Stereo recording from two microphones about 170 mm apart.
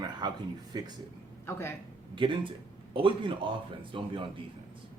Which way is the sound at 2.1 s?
30° right (ahead or behind).